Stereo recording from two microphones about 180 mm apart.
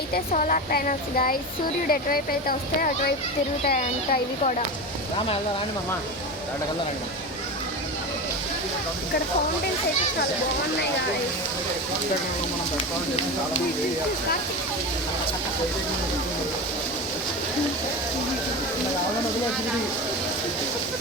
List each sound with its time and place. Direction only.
0.1 s speech: 45° left (ahead or behind)